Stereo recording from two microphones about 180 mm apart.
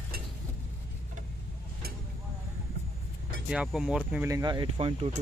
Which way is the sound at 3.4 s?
5° right (ahead or behind).